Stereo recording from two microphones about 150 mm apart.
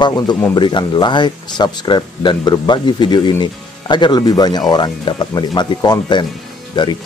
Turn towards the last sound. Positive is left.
turn(degrees=30)  # may be behind; listen again after turning